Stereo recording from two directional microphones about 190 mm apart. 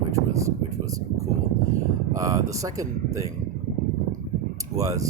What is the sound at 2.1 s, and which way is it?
Speech, 15° right (ahead or behind).